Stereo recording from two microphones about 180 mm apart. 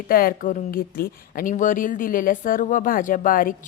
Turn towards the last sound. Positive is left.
turn(degrees=50)  # may be behind; listen again after turning